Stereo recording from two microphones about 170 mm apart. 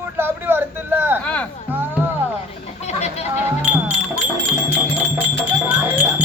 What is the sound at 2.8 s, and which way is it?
Chicken, 40° left (ahead or behind).